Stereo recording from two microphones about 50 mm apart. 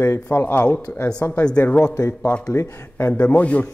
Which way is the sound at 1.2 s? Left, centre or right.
Left.